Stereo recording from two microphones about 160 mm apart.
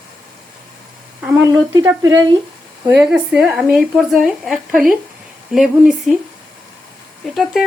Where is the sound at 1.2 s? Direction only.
10° right (ahead or behind).